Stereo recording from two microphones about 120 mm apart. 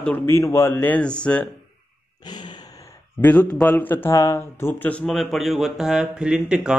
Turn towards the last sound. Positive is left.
turn(degrees=-5)  # may be behind; listen again after turning